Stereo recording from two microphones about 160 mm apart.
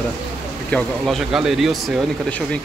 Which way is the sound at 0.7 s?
Centre (ahead or behind).